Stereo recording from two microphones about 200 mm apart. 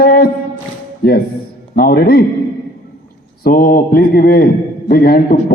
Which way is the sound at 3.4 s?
45° left (ahead or behind).